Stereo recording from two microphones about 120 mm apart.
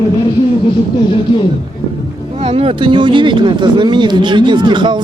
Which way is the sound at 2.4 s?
55° right (ahead or behind).